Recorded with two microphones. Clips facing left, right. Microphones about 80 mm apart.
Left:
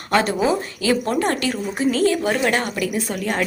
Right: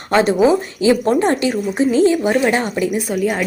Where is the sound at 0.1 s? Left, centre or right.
Right.